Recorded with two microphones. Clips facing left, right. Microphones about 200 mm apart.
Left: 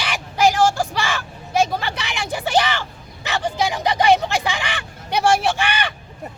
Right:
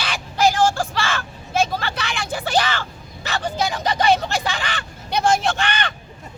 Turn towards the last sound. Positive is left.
turn(degrees=10)  # may be behind; listen again after turning